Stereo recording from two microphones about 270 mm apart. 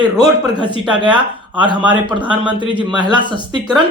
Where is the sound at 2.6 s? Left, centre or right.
Centre.